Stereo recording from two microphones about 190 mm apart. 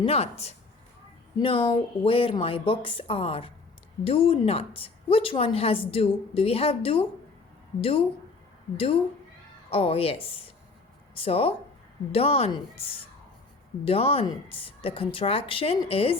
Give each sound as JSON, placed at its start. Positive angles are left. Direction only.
{"t": 0.0, "sound": "a woman's voice", "side_deg": 30}
{"t": 9.6, "sound": "a woman's voice", "side_deg": 30}